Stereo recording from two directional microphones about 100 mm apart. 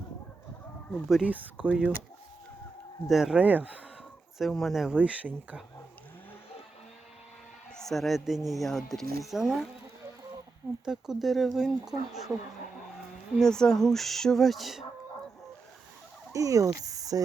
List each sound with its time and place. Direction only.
1.0 s speech: 5° right (ahead or behind)
1.3 s speech: 15° right (ahead or behind)
3.1 s speech: centre (ahead or behind)
3.3 s speech: 15° right (ahead or behind)
4.4 s speech: centre (ahead or behind)
7.8 s speech: centre (ahead or behind)
10.8 s speech: 5° right (ahead or behind)
13.4 s speech: 5° left (ahead or behind)
16.3 s speech: 35° right (ahead or behind)